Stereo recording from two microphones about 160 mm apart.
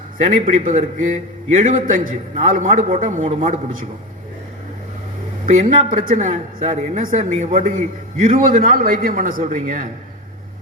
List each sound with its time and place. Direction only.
0.3 s a man's voice: 55° right (ahead or behind)
5.5 s speech: 55° right (ahead or behind)